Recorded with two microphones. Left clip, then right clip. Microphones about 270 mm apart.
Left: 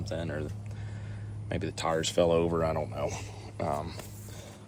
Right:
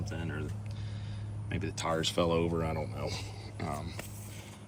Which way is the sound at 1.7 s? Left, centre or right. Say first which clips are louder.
Left 3 dB; centre.